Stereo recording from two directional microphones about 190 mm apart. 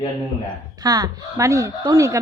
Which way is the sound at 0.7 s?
20° right (ahead or behind).